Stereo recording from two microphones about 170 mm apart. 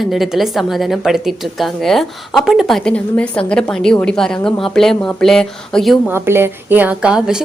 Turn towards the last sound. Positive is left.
turn(degrees=-5)  # may be behind; listen again after turning